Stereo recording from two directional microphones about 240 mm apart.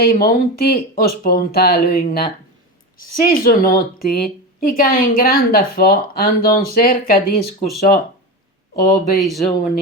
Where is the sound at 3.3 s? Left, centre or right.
Left.